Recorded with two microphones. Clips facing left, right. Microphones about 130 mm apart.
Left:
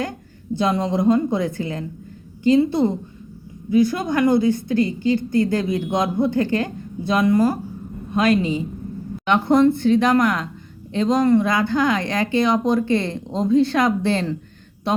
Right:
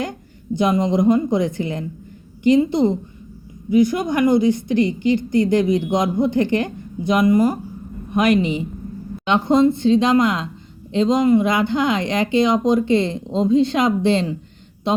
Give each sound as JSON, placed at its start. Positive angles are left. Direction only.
{"t": 0.5, "sound": "a woman's voice", "side_deg": -15}